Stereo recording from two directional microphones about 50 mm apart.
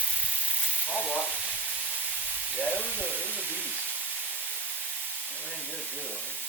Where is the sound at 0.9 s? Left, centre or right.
Left.